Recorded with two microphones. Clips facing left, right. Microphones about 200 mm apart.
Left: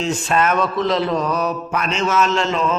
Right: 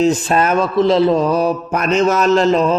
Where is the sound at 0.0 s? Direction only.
35° right (ahead or behind).